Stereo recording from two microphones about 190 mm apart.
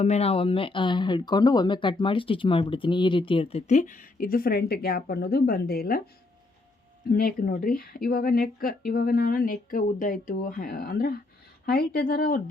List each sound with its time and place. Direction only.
0.0 s speech: 35° left (ahead or behind); by 6.0 s 50° left (ahead or behind)
7.3 s speech: 50° left (ahead or behind)